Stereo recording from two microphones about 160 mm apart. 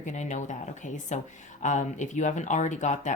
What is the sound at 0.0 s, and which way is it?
Speech, 50° left (ahead or behind).